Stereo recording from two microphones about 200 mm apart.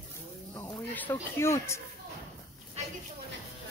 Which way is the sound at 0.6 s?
10° left (ahead or behind).